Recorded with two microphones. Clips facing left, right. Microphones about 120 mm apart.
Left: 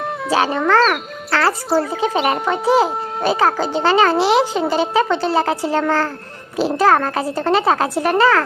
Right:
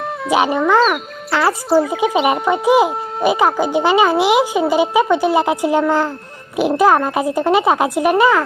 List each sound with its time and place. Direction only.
0.3 s music: 15° right (ahead or behind)
0.7 s speech: 15° right (ahead or behind)
1.4 s speech: centre (ahead or behind)
1.9 s speech: 10° right (ahead or behind)